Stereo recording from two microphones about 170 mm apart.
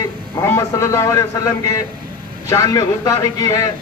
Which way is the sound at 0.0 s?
20° left (ahead or behind).